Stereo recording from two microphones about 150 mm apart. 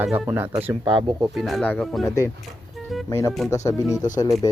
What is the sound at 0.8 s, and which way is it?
Speech, 30° right (ahead or behind).